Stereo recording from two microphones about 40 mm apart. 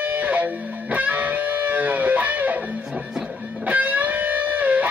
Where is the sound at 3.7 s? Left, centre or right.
Right.